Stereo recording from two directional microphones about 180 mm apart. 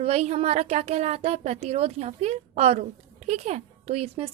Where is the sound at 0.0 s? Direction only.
35° right (ahead or behind).